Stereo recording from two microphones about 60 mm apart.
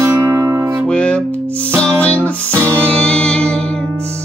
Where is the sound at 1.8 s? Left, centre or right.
Left.